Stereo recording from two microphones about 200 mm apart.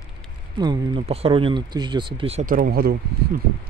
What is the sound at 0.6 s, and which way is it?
Speech, 25° right (ahead or behind).